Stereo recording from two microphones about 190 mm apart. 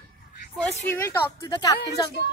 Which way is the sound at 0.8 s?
15° left (ahead or behind).